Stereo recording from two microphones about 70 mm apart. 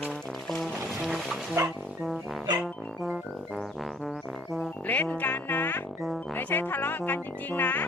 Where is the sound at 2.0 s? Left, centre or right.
Centre.